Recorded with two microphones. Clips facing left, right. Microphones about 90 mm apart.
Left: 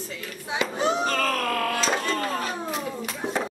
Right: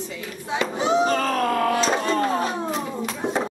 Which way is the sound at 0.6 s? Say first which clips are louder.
Right 4 dB; centre (ahead or behind).